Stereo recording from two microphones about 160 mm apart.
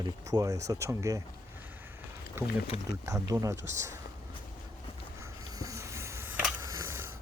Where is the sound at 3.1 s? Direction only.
20° right (ahead or behind).